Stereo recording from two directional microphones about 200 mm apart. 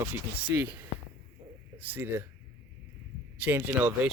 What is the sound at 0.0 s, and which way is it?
Speech, 10° right (ahead or behind).